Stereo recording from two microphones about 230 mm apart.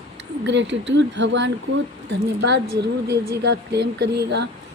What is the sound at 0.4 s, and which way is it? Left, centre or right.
A woman's voice, right.